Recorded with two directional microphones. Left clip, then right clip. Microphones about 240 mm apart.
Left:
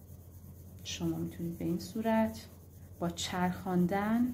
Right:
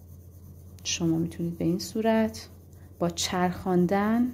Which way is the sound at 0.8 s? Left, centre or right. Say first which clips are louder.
Right 9 dB; right.